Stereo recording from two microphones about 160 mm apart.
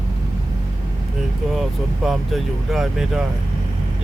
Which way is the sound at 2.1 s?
Centre (ahead or behind).